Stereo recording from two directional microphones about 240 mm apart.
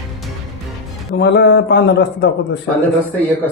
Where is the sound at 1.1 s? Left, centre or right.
Left.